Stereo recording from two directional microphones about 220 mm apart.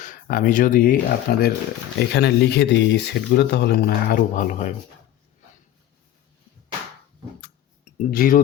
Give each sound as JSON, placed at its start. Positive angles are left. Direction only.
{"t": 0.0, "sound": "speech", "side_deg": 40}
{"t": 8.1, "sound": "speech", "side_deg": 40}